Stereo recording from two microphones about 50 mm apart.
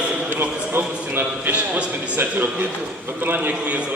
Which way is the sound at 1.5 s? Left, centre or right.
Right.